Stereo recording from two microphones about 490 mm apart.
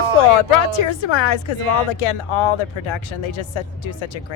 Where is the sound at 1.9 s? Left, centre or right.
Left.